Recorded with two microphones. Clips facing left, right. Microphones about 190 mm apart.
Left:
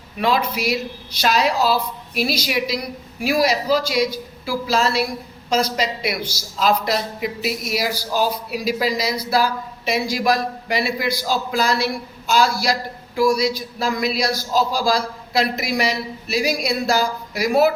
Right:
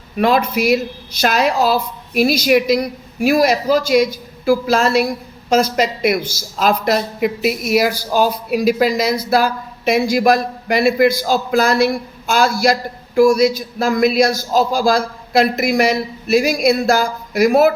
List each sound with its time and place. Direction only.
0.2 s a woman's voice: 50° right (ahead or behind)